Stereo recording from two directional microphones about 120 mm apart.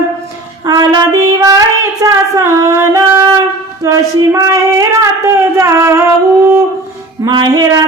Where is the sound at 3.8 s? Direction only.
25° right (ahead or behind).